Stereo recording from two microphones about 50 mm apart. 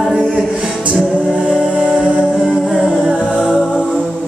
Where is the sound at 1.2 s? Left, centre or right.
Right.